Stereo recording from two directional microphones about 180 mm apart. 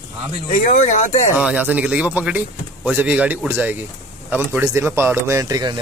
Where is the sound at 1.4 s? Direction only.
5° right (ahead or behind).